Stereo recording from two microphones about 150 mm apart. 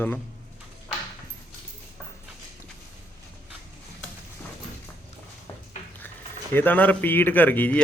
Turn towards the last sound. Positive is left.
turn(degrees=10)  # may be behind; listen again after turning